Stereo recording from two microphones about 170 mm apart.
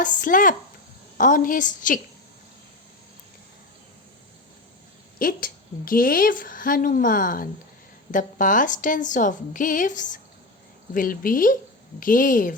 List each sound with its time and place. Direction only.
0.0 s a woman's voice: 50° left (ahead or behind)
5.2 s a woman's voice: 55° left (ahead or behind)